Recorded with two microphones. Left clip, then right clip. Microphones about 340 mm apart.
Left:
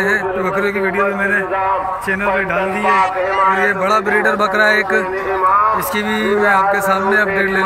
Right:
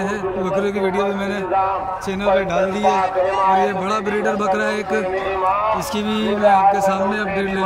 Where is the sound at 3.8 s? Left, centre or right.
Centre.